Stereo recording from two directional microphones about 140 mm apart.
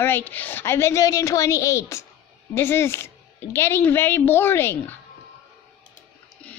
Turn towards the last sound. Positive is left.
turn(degrees=15)  # may be behind; listen again after turning